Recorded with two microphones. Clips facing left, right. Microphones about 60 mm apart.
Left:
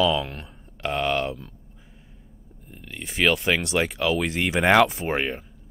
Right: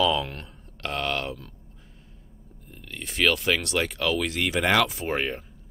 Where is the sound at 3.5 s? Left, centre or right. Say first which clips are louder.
Left 3 dB; centre.